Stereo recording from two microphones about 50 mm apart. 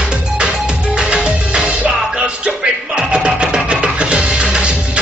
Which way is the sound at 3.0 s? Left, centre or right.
Centre.